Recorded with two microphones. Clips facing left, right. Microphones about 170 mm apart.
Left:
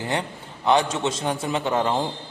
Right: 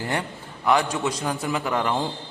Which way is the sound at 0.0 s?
20° left (ahead or behind).